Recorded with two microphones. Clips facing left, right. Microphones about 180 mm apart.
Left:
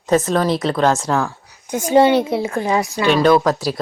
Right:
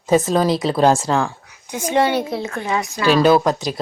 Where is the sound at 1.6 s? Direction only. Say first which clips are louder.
Left 5 dB; 40° left (ahead or behind).